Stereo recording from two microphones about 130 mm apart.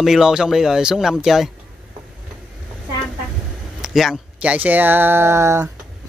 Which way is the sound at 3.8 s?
5° right (ahead or behind).